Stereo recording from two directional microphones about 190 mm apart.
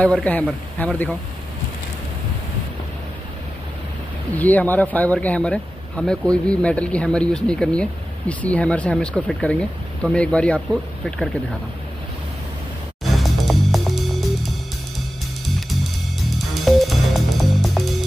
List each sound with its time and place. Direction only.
0.0 s a man's voice: 5° left (ahead or behind)
4.4 s speech: 10° left (ahead or behind)
13.0 s music: centre (ahead or behind)
16.6 s music: centre (ahead or behind)